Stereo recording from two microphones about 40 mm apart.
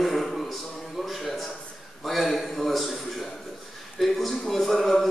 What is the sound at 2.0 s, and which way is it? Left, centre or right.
Speech, centre.